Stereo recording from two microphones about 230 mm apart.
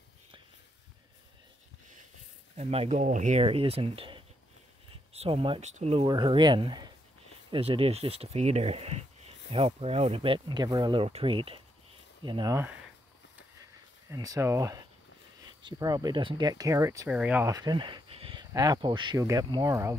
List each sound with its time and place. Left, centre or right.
2.5 s speech: right
14.1 s speech: centre